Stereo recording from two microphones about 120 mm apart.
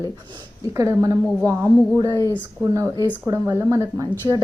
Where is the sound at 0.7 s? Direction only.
30° right (ahead or behind).